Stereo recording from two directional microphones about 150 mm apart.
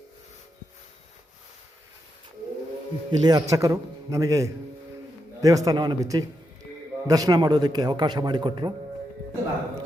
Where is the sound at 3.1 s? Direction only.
30° right (ahead or behind).